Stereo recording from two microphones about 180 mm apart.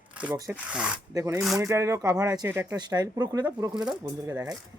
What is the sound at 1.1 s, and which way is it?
Speech, 15° right (ahead or behind).